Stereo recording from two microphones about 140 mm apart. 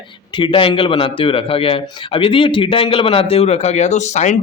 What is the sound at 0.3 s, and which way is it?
A man's voice, 40° left (ahead or behind).